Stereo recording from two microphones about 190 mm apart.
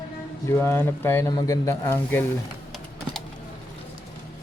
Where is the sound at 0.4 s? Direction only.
10° left (ahead or behind).